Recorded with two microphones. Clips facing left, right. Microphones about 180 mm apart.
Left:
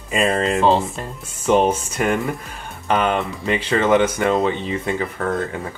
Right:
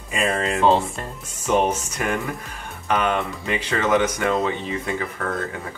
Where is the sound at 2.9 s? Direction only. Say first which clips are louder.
Left 3 dB; 30° left (ahead or behind).